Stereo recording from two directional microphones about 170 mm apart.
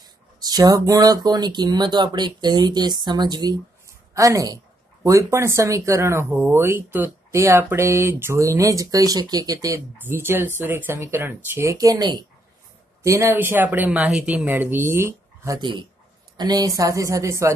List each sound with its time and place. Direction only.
0.0 s speech: 20° right (ahead or behind)